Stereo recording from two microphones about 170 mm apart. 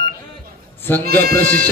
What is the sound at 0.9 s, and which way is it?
Speech, 10° left (ahead or behind).